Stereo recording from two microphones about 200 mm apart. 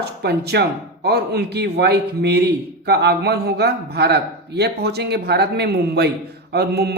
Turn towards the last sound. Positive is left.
turn(degrees=-55)  # may be behind; listen again after turning